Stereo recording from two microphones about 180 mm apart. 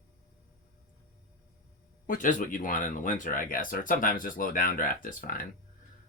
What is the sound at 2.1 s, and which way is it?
Speech, 50° left (ahead or behind).